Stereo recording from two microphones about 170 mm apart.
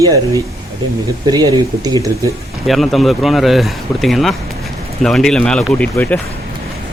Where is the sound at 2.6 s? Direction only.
Centre (ahead or behind).